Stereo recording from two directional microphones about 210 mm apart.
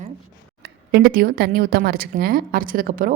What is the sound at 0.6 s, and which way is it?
A woman's voice, 50° right (ahead or behind).